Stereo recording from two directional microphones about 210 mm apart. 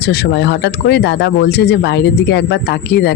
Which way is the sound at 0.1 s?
55° left (ahead or behind).